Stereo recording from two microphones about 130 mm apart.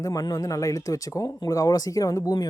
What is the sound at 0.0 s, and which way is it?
Speech, 25° left (ahead or behind).